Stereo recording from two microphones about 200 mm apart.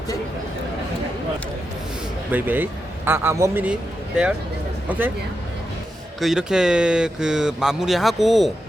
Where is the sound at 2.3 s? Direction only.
10° right (ahead or behind).